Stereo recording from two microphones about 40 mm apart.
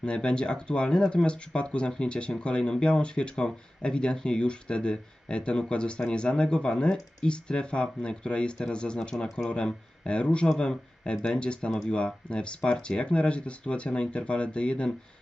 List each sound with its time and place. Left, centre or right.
0.0 s speech: left